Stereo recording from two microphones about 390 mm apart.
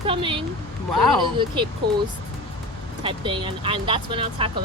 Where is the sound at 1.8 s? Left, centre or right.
Right.